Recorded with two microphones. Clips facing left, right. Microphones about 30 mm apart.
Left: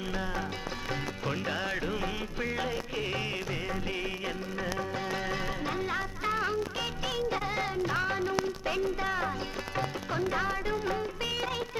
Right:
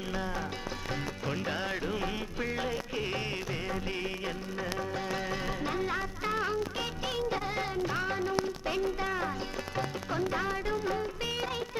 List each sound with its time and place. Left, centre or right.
0.1 s music: centre
3.7 s music of bollywood: centre
4.6 s music: centre
6.7 s music: centre
7.3 s music: centre
9.0 s music: centre